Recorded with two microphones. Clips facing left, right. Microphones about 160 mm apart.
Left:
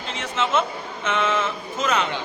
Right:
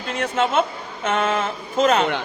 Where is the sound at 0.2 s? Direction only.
55° right (ahead or behind).